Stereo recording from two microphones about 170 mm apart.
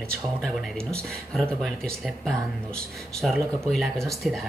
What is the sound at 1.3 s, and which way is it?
Speech, 5° left (ahead or behind).